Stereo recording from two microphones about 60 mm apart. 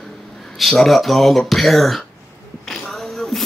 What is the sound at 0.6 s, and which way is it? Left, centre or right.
Speech, centre.